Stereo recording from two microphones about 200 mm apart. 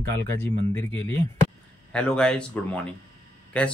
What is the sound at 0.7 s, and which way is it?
Speech, 10° left (ahead or behind).